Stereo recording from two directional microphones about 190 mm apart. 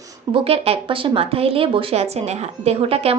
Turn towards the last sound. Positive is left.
turn(degrees=-30)  # may be behind; listen again after turning